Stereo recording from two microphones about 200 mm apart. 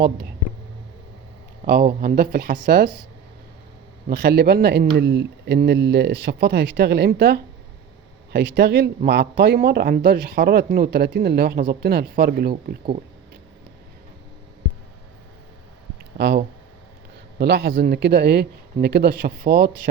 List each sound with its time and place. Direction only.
1.6 s speech: 50° right (ahead or behind)
2.6 s speech: 60° right (ahead or behind)
4.1 s speech: 55° right (ahead or behind)
16.1 s speech: 55° right (ahead or behind)